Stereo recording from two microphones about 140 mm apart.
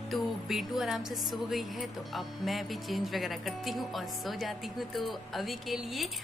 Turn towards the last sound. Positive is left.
turn(degrees=0)  # may be behind; listen again after turning